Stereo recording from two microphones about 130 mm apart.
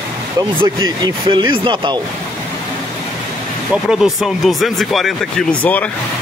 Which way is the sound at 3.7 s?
5° right (ahead or behind).